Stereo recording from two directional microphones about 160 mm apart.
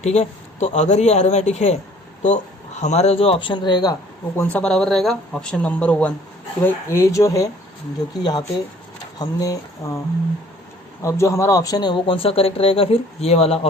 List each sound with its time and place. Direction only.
0.0 s a man's voice: 45° left (ahead or behind); by 3.9 s 25° left (ahead or behind)
4.4 s speech: 10° left (ahead or behind)
11.0 s speech: 20° left (ahead or behind); by 13.7 s 40° left (ahead or behind)